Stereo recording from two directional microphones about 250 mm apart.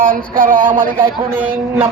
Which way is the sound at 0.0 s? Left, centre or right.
Right.